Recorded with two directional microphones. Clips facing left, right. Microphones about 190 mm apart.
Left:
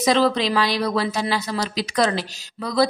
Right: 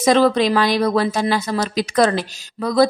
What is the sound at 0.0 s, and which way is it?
Speech, 50° right (ahead or behind).